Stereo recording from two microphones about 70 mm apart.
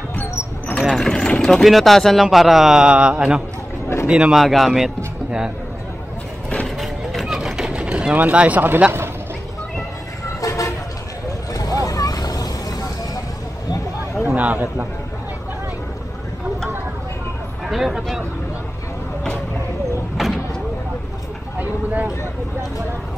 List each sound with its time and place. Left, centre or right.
0.1 s cricket: left
0.7 s speech: centre
1.6 s a man's voice: centre
4.4 s speech: centre
6.8 s a sound: centre; by 8.8 s right
10.4 s vehicle: left
14.2 s a man's voice: right
17.6 s speech: centre
20.2 s vehicle: centre
21.5 s a sound: right